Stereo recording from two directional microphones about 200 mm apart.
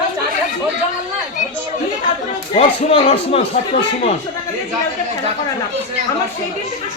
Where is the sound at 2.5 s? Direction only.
30° left (ahead or behind).